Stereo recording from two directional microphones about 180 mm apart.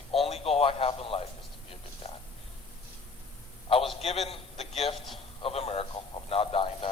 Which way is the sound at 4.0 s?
35° left (ahead or behind).